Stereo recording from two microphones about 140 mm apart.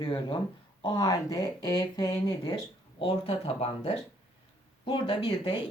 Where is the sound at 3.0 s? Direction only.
45° left (ahead or behind).